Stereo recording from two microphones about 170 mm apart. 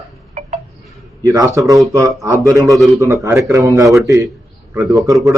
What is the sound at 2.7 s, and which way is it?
Speech, centre (ahead or behind).